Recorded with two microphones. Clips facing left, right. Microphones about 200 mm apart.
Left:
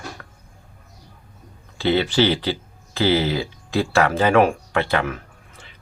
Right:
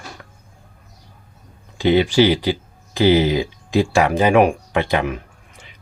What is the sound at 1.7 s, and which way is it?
Speech, 15° right (ahead or behind).